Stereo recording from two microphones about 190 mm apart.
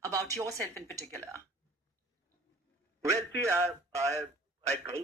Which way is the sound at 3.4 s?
15° right (ahead or behind).